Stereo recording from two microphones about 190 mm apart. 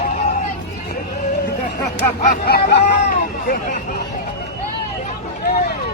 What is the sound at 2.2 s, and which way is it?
Chatter, 50° left (ahead or behind).